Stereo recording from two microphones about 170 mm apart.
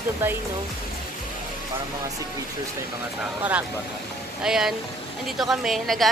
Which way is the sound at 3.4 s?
10° right (ahead or behind).